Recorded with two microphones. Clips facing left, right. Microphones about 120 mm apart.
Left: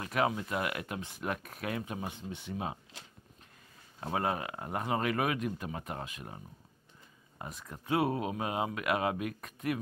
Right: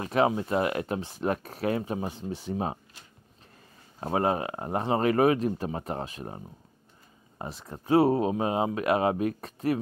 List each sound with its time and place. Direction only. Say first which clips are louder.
0.0 s speech: right 6 dB; 30° right (ahead or behind)
4.0 s speech: right 6 dB; 30° right (ahead or behind)